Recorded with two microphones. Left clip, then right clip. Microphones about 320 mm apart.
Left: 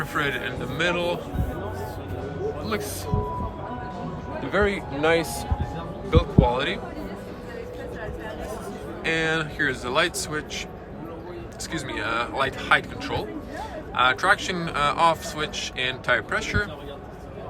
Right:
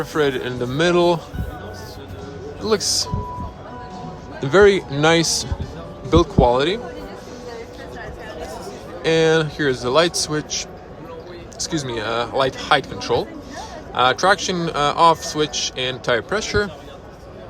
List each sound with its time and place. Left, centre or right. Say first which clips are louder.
0.0 s a man's voice: right 6 dB; centre
2.6 s a man's voice: right 10 dB; centre
4.4 s a man's voice: right 11 dB; centre
9.0 s a man's voice: right 8 dB; centre